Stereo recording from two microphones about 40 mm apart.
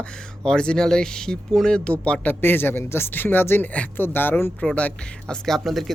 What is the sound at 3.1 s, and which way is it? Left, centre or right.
A man's voice, left.